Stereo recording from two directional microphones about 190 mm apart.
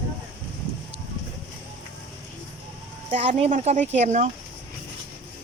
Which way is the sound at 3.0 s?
35° right (ahead or behind).